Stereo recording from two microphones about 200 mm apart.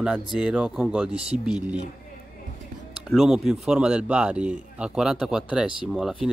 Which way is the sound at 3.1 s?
Centre (ahead or behind).